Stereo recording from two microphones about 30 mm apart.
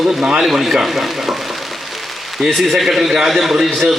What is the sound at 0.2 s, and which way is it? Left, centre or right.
Speech, right.